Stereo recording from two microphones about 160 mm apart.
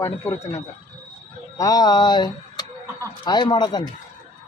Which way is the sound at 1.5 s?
20° left (ahead or behind).